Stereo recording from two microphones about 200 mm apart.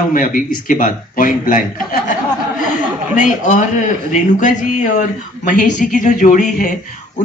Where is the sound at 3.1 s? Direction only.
40° left (ahead or behind).